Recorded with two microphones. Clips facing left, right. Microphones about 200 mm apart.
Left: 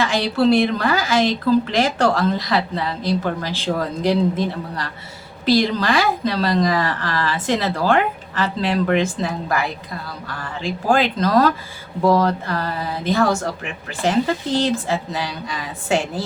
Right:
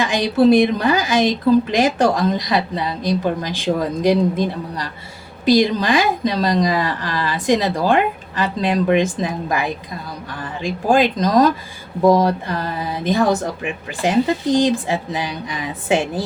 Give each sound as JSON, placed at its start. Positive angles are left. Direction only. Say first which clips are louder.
{"t": 0.0, "sound": "speech", "louder": "right 3 dB", "side_deg": -15}